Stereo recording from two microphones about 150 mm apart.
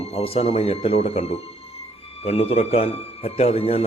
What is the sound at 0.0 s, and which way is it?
A man's voice, 45° left (ahead or behind).